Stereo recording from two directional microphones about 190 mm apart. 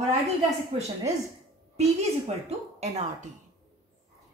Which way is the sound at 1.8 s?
35° right (ahead or behind).